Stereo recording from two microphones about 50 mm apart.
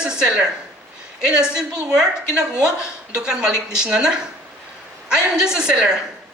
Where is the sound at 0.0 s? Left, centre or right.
Centre.